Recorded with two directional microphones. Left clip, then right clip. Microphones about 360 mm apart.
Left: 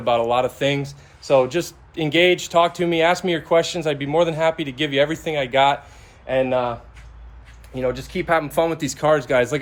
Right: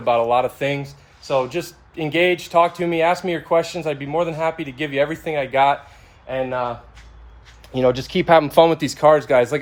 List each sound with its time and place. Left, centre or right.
0.0 s speech: centre
7.8 s speech: right